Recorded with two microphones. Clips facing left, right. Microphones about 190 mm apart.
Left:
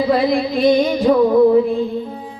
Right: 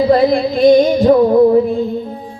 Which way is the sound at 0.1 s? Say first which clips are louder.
Right 4 dB; 45° right (ahead or behind).